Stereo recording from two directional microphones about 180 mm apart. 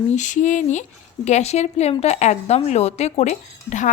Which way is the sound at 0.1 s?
45° left (ahead or behind).